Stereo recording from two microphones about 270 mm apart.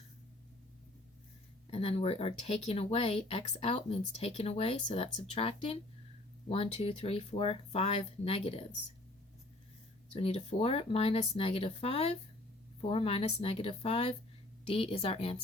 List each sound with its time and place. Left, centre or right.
1.7 s speech: left
10.2 s speech: left